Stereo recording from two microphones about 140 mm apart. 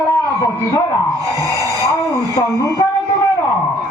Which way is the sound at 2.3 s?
25° left (ahead or behind).